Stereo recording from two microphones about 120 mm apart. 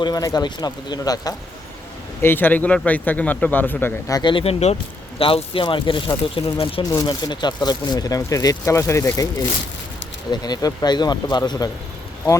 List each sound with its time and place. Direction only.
0.0 s speech: 30° left (ahead or behind)
2.2 s speech: 15° left (ahead or behind)
4.1 s speech: 40° left (ahead or behind)
4.4 s speech: 60° left (ahead or behind)
5.2 s speech: 45° left (ahead or behind)
6.9 s speech: 35° left (ahead or behind)
10.3 s speech: 35° left (ahead or behind)